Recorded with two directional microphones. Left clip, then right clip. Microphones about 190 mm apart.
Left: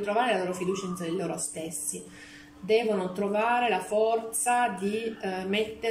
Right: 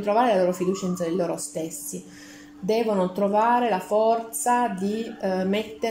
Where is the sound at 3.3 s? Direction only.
30° right (ahead or behind).